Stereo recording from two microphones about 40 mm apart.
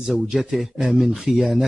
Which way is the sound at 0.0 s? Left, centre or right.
Centre.